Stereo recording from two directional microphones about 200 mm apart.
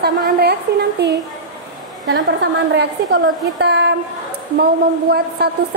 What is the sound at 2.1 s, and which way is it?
A woman's voice, 60° right (ahead or behind).